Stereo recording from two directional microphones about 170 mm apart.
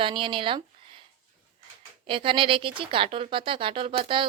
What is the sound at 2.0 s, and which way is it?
Speech, 30° right (ahead or behind).